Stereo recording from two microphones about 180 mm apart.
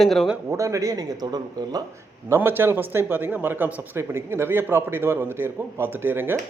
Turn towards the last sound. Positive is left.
turn(degrees=-10)  # may be behind; listen again after turning